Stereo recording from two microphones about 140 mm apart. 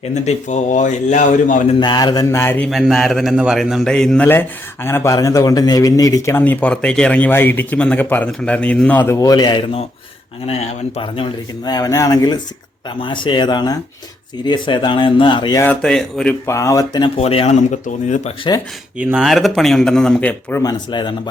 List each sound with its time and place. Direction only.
0.1 s a man's voice: 55° left (ahead or behind)
1.8 s a man's voice: 30° left (ahead or behind)
2.6 s a man's voice: centre (ahead or behind); by 9.6 s 30° left (ahead or behind)
10.4 s a man's voice: 45° left (ahead or behind)
15.6 s speech: 10° left (ahead or behind)
16.5 s a man's voice: 20° left (ahead or behind)
17.2 s a man's voice: 45° left (ahead or behind); by 18.2 s 60° left (ahead or behind)
18.5 s speech: 35° left (ahead or behind)
18.9 s speech: 5° right (ahead or behind)
20.6 s speech: 30° left (ahead or behind)